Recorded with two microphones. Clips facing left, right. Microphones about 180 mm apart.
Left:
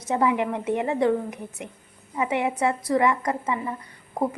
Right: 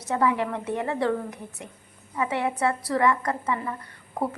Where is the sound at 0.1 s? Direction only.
15° left (ahead or behind).